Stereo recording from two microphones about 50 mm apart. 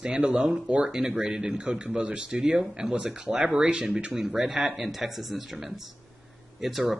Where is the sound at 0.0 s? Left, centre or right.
Centre.